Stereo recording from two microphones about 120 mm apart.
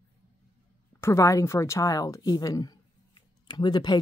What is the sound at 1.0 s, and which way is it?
Speech, 25° left (ahead or behind).